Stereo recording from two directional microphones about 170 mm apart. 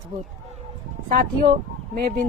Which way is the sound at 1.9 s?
60° right (ahead or behind).